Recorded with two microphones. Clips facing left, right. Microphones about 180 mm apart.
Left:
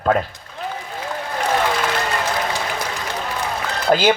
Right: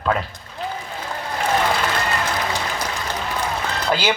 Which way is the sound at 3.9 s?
45° left (ahead or behind).